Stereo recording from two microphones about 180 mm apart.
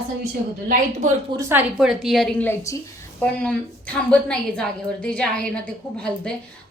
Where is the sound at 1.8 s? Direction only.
Centre (ahead or behind).